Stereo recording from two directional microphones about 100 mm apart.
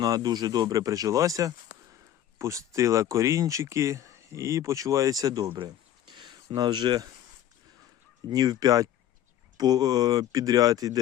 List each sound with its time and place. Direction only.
0.0 s speech: 40° right (ahead or behind)
5.5 s a sound: 50° right (ahead or behind)
8.3 s speech: 40° right (ahead or behind)